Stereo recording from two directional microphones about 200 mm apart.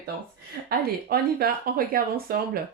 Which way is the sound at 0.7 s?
50° right (ahead or behind).